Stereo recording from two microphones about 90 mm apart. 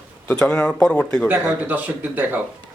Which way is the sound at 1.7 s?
20° right (ahead or behind).